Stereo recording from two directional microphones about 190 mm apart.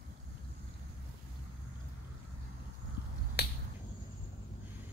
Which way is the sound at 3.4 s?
60° left (ahead or behind).